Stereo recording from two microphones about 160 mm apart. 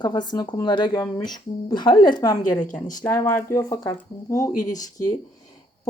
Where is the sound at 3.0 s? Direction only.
15° left (ahead or behind).